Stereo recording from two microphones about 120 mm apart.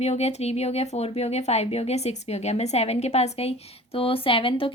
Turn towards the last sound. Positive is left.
turn(degrees=50)  # may be behind; listen again after turning